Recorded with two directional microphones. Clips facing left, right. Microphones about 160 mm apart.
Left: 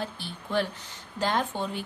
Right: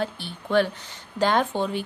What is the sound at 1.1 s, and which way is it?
Speech, 85° right.